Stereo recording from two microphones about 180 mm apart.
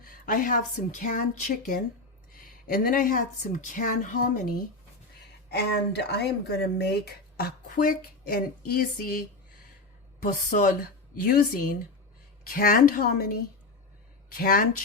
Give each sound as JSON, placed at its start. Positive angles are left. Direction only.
{"t": 0.0, "sound": "speech", "side_deg": 50}
{"t": 5.5, "sound": "a woman's voice", "side_deg": 65}
{"t": 14.3, "sound": "speech", "side_deg": 55}